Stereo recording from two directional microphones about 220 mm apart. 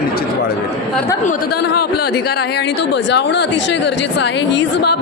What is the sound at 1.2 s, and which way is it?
Speech, 40° left (ahead or behind).